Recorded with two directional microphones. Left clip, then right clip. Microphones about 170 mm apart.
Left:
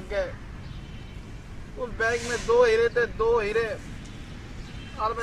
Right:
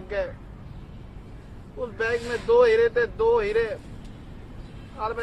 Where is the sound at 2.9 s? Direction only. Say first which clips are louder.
Right 2 dB; 15° right (ahead or behind).